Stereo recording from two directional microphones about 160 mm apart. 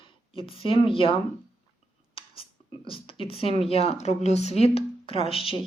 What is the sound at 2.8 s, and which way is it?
Speech, 35° left (ahead or behind).